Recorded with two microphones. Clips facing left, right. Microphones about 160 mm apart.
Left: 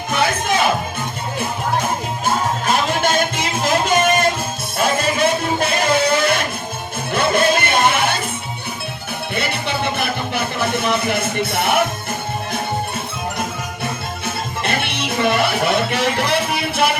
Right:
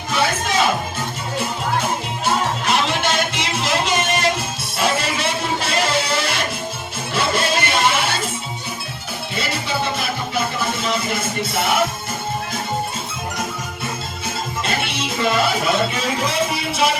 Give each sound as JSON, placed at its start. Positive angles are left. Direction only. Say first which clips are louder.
{"t": 2.2, "sound": "music", "louder": "left 1 dB", "side_deg": 50}
{"t": 9.3, "sound": "music", "louder": "left 1 dB", "side_deg": 60}
{"t": 14.3, "sound": "music", "louder": "left 1 dB", "side_deg": 60}